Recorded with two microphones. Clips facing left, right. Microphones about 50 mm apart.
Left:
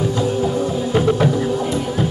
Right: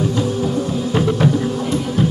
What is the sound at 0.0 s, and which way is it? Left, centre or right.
Music, left.